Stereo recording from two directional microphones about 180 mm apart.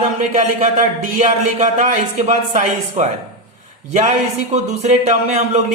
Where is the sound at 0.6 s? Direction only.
40° right (ahead or behind).